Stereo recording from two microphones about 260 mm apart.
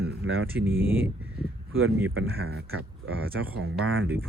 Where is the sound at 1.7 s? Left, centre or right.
Right.